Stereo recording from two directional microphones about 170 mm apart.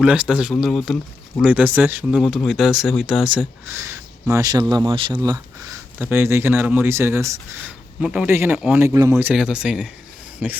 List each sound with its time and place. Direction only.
0.0 s speech: 5° right (ahead or behind)
2.0 s speech: centre (ahead or behind)
8.9 s speech: 20° right (ahead or behind)